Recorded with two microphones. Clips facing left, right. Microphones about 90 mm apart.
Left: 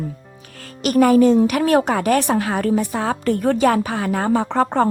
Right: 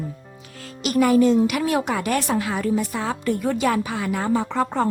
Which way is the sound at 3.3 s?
60° left (ahead or behind).